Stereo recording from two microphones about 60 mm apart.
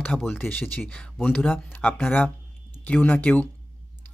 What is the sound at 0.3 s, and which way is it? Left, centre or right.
Speech, left.